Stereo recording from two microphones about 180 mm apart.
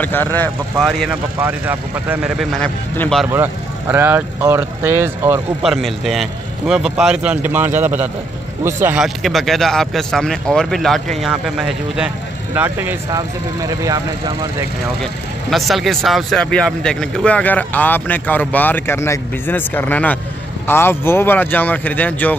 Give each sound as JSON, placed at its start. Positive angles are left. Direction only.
{"t": 0.0, "sound": "speech", "side_deg": 10}
{"t": 1.4, "sound": "speech", "side_deg": -10}
{"t": 3.3, "sound": "speech", "side_deg": -10}
{"t": 5.6, "sound": "speech", "side_deg": 0}
{"t": 15.5, "sound": "speech", "side_deg": 0}